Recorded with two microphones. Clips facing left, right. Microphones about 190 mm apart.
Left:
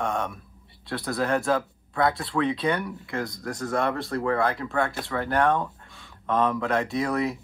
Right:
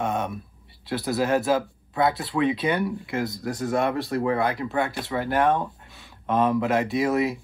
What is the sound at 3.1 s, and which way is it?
Speech, 20° right (ahead or behind).